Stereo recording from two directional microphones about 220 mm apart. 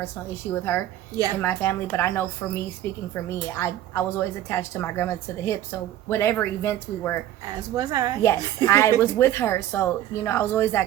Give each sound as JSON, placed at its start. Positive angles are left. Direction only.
{"t": 0.5, "sound": "a woman's voice", "side_deg": 10}
{"t": 1.1, "sound": "a woman's voice", "side_deg": -15}
{"t": 1.4, "sound": "a woman's voice", "side_deg": 10}
{"t": 3.2, "sound": "a woman's voice", "side_deg": 10}
{"t": 7.4, "sound": "a woman's voice", "side_deg": -15}
{"t": 8.6, "sound": "a woman's voice", "side_deg": 15}